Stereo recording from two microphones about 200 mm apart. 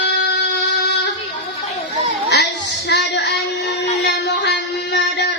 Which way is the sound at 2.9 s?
60° left (ahead or behind).